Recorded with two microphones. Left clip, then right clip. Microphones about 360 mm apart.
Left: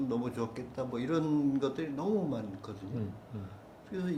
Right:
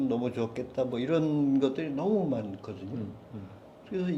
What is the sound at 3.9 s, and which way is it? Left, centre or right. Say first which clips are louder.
Speech: right 4 dB; right.